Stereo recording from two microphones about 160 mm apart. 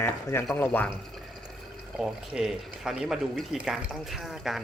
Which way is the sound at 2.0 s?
Centre (ahead or behind).